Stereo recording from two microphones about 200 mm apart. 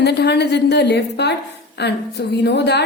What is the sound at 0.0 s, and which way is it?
A woman's voice, 55° left (ahead or behind).